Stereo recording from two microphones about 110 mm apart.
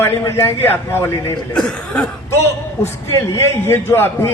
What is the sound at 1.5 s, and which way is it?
Speech, 10° left (ahead or behind).